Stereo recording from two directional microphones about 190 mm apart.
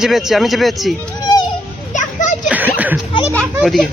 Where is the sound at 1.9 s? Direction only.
40° left (ahead or behind).